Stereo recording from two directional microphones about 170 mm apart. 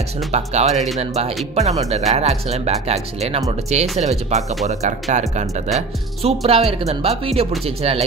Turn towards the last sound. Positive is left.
turn(degrees=-35)  # may be behind; listen again after turning